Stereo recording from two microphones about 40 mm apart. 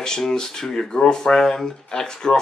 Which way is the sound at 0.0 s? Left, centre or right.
Centre.